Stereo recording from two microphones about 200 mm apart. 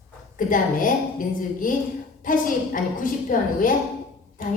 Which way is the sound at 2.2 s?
40° left (ahead or behind).